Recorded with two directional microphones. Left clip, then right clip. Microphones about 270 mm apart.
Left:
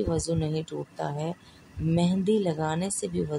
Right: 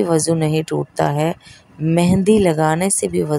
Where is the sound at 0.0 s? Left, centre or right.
Right.